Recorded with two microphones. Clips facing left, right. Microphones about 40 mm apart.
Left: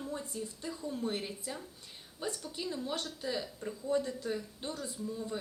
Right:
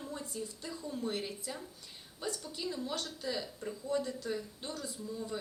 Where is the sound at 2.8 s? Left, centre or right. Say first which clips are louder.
Left 1 dB; centre.